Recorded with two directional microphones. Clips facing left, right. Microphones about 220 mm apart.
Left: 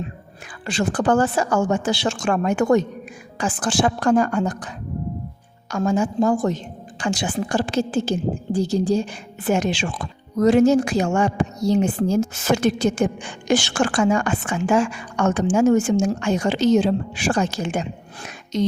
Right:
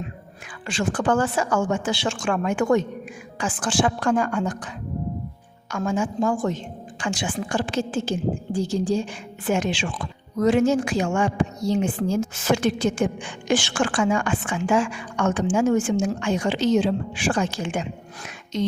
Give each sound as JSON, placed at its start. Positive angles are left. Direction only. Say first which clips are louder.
{"t": 0.7, "sound": "a woman's voice", "louder": "left 3 dB", "side_deg": 40}
{"t": 5.7, "sound": "a woman's voice", "louder": "left 4 dB", "side_deg": 40}